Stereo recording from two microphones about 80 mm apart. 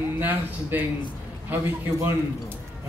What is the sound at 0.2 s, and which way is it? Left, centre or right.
Speech, right.